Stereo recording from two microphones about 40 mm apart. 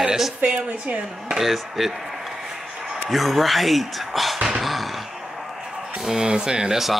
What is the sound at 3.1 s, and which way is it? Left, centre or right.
Speech, centre.